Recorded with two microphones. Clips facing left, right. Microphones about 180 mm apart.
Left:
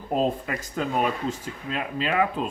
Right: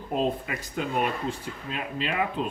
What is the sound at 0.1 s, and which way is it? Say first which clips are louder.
Speech: left 3 dB; 40° left (ahead or behind).